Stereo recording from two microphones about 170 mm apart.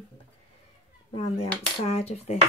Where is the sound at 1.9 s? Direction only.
40° left (ahead or behind).